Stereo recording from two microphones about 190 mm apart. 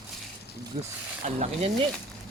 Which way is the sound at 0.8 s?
35° right (ahead or behind).